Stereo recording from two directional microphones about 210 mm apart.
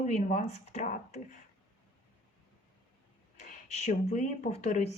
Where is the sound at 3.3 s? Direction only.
35° left (ahead or behind).